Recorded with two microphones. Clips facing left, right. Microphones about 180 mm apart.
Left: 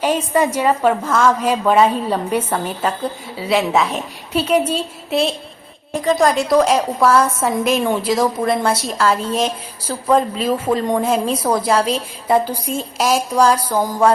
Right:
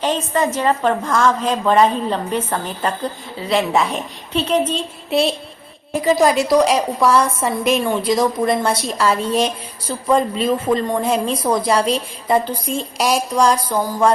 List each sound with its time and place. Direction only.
0.0 s a woman's voice: 10° left (ahead or behind)